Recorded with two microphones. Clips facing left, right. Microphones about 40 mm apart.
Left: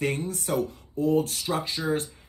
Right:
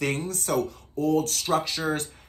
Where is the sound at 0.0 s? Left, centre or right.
Right.